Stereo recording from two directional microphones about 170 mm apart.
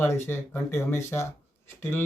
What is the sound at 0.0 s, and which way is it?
Speech, 15° left (ahead or behind).